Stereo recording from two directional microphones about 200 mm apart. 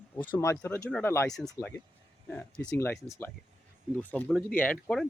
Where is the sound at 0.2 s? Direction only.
10° left (ahead or behind).